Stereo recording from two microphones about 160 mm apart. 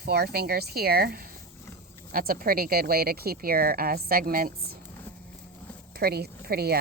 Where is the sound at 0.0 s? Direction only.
80° right; by 4.5 s 65° right (ahead or behind).